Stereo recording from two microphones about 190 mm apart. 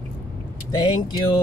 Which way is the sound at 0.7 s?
20° left (ahead or behind).